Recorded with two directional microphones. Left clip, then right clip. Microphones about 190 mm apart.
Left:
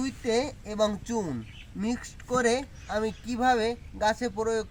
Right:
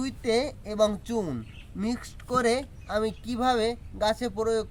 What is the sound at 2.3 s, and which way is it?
Speech, 30° right (ahead or behind).